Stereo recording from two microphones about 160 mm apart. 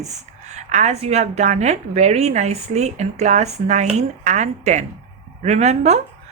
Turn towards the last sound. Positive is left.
turn(degrees=-45)  # may be behind; listen again after turning